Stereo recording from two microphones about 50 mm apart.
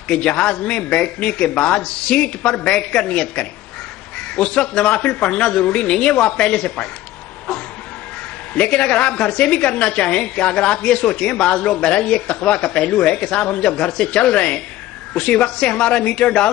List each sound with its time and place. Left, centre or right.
0.1 s a man's voice: centre
8.5 s a woman's voice: centre